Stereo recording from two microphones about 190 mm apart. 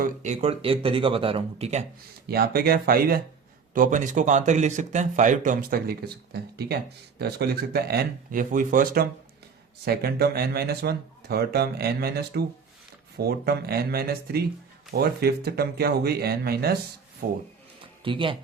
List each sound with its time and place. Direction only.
0.0 s speech: 40° right (ahead or behind)
2.2 s speech: 55° right (ahead or behind)
18.0 s speech: 25° right (ahead or behind)